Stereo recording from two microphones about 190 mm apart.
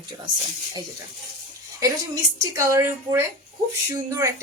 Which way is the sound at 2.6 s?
15° right (ahead or behind).